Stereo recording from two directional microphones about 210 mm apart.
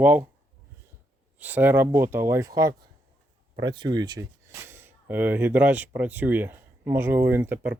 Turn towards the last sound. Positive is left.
turn(degrees=-5)  # may be behind; listen again after turning